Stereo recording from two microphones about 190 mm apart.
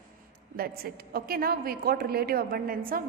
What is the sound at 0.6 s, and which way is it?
A woman's voice, 50° right (ahead or behind).